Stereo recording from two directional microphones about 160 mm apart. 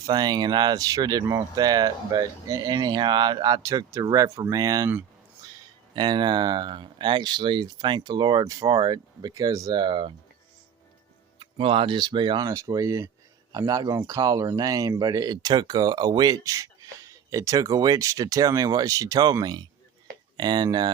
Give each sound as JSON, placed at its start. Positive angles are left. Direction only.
{"t": 0.0, "sound": "speech", "side_deg": -25}
{"t": 5.9, "sound": "speech", "side_deg": -30}
{"t": 11.3, "sound": "speech", "side_deg": -35}